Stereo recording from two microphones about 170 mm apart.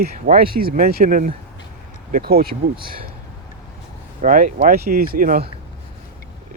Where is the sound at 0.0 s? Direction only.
55° right (ahead or behind).